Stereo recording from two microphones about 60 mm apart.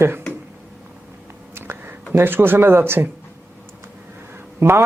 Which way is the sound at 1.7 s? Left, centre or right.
Right.